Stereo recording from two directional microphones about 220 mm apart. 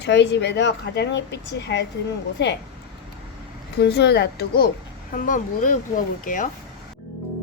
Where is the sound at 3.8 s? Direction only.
50° left (ahead or behind).